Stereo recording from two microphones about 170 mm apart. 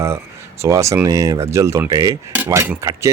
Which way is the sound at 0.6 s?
15° right (ahead or behind).